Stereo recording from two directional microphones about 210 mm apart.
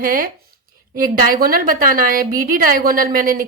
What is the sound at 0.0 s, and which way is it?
A woman's voice, 40° right (ahead or behind).